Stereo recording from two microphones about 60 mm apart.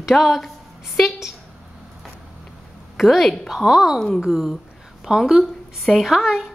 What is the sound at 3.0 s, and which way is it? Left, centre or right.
A woman's voice, centre.